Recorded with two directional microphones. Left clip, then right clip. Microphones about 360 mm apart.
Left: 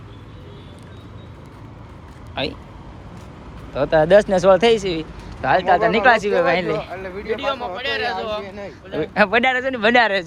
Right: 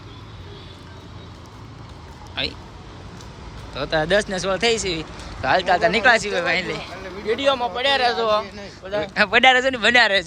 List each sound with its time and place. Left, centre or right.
2.3 s speech: centre
3.8 s speech: centre
7.3 s speech: centre
9.0 s speech: centre